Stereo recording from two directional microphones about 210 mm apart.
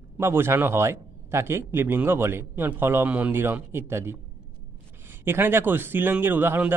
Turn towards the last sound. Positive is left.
turn(degrees=-10)  # may be behind; listen again after turning